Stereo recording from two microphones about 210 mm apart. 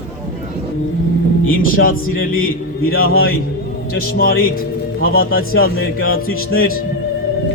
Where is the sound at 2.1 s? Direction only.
45° left (ahead or behind).